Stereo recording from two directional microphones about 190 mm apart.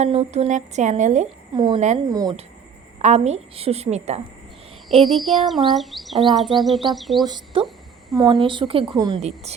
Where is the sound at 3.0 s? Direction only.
35° right (ahead or behind).